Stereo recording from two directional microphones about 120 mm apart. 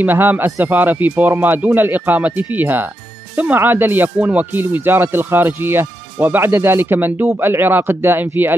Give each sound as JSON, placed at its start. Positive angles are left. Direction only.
{"t": 0.0, "sound": "speech", "side_deg": -15}